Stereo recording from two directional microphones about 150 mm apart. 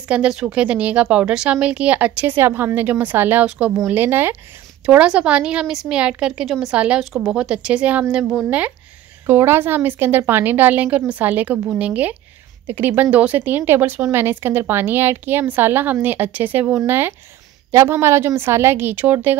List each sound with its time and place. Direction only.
0.1 s speech: 5° right (ahead or behind)